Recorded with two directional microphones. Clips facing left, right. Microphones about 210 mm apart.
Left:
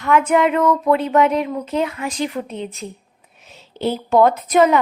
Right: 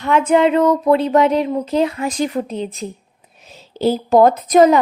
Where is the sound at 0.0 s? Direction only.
30° right (ahead or behind).